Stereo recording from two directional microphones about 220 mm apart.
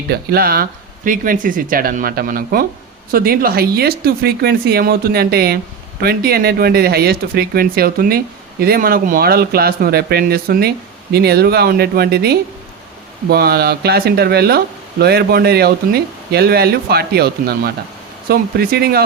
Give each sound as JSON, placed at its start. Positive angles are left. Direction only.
{"t": 0.1, "sound": "speech", "side_deg": -45}